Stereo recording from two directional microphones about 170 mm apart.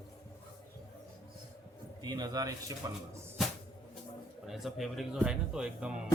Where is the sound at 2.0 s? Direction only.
25° right (ahead or behind).